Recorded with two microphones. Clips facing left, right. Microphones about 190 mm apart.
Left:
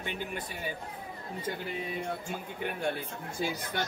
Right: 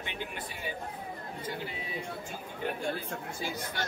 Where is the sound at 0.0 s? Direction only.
45° left (ahead or behind).